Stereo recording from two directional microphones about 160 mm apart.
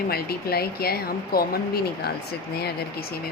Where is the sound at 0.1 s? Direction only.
75° left (ahead or behind).